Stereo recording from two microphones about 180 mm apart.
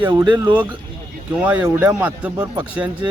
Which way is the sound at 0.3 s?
25° right (ahead or behind).